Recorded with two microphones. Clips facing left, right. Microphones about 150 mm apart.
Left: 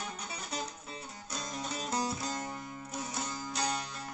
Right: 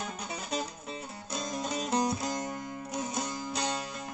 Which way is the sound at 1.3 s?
20° right (ahead or behind).